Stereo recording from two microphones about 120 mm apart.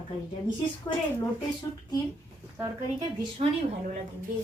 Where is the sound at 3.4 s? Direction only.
65° right (ahead or behind).